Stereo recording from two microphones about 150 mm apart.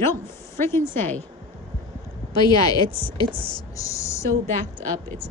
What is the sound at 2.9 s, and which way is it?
Speech, 35° right (ahead or behind).